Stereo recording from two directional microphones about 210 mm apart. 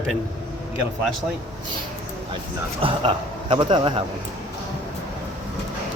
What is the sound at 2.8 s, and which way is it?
A man's voice, 25° right (ahead or behind).